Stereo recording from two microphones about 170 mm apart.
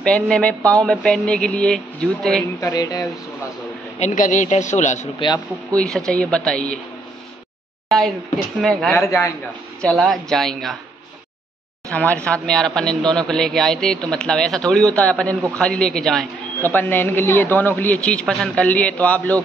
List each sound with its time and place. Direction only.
0.0 s speech: 5° left (ahead or behind)
2.4 s speech: 20° left (ahead or behind)
4.0 s a man's voice: 50° left (ahead or behind)
5.8 s speech: 5° left (ahead or behind)
8.5 s speech: centre (ahead or behind)
8.9 s speech: 15° left (ahead or behind)
9.8 s speech: 5° left (ahead or behind)
11.9 s speech: 10° left (ahead or behind)